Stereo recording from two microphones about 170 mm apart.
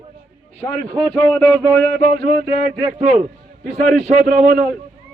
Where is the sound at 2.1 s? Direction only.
70° right (ahead or behind).